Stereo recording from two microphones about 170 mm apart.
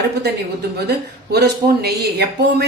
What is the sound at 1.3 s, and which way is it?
Speech, 70° right (ahead or behind).